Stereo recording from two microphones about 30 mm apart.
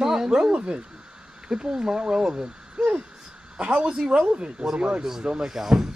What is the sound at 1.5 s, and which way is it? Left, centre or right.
Speech, right.